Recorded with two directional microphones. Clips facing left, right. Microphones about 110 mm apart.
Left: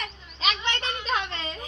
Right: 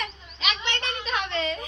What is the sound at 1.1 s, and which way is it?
Speech, 35° left (ahead or behind).